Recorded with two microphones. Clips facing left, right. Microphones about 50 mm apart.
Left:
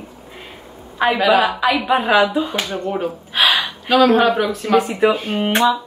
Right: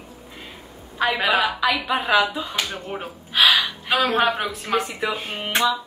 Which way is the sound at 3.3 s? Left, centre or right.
Left.